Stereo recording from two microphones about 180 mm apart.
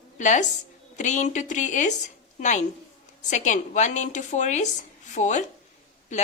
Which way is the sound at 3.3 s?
40° left (ahead or behind).